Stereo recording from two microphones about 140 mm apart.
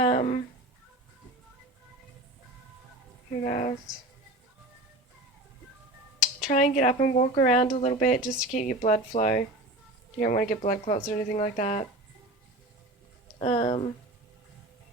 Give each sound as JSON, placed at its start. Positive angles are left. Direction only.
{"t": 0.0, "sound": "a sound", "side_deg": 55}
{"t": 3.4, "sound": "speech", "side_deg": 60}
{"t": 3.9, "sound": "speech", "side_deg": -5}
{"t": 6.5, "sound": "speech", "side_deg": 65}
{"t": 8.5, "sound": "speech", "side_deg": 60}
{"t": 10.2, "sound": "speech", "side_deg": 75}
{"t": 10.6, "sound": "speech", "side_deg": 55}
{"t": 13.4, "sound": "speech", "side_deg": 50}